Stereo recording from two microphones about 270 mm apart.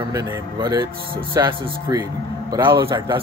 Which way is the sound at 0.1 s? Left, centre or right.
Centre.